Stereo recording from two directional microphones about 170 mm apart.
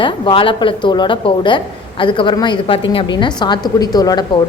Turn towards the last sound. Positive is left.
turn(degrees=20)  # may be behind; listen again after turning